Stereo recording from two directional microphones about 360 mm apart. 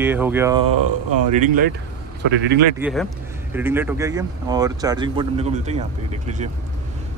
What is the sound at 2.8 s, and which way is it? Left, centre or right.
Speech, centre.